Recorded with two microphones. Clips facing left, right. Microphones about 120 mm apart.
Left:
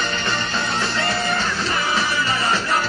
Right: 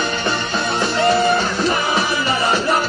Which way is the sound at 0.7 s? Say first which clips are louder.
Right 10 dB; 15° right (ahead or behind).